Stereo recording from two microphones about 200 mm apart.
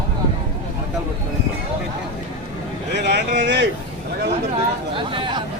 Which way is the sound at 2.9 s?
55° right (ahead or behind).